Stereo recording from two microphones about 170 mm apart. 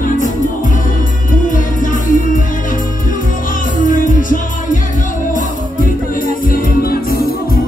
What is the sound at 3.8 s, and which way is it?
Music, 50° left (ahead or behind).